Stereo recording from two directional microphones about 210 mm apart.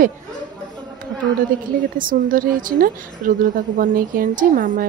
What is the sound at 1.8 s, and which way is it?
Speech, 40° right (ahead or behind).